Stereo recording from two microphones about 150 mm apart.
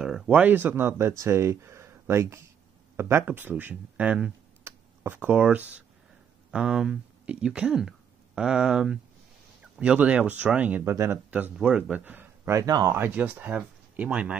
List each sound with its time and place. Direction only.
0.0 s speech: 5° right (ahead or behind); by 12.9 s 20° right (ahead or behind)
12.9 s speech: 10° right (ahead or behind)